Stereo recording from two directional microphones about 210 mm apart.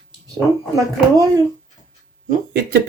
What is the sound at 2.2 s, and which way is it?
Speech, 40° right (ahead or behind).